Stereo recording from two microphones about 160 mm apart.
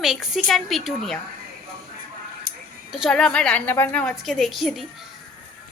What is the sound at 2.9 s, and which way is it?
A woman's voice, centre (ahead or behind).